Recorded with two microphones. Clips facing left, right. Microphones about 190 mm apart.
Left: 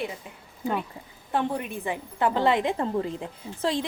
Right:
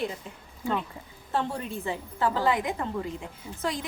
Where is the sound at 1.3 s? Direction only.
15° left (ahead or behind).